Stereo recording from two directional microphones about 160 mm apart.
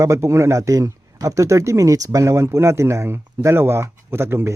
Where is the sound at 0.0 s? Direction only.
15° right (ahead or behind).